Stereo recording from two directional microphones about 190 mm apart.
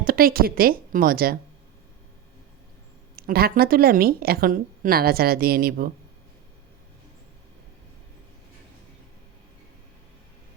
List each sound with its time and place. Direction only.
0.0 s a woman's voice: 50° right (ahead or behind)
3.2 s speech: 50° right (ahead or behind)